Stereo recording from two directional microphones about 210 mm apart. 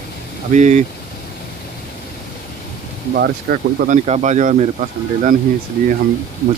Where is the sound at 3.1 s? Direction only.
50° right (ahead or behind).